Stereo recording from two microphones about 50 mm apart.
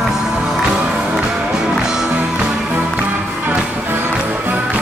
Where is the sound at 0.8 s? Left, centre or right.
Right.